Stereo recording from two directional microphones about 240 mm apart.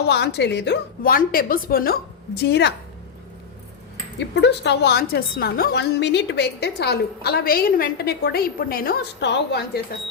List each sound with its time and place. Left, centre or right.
0.1 s a woman's voice: left
4.2 s a woman's voice: left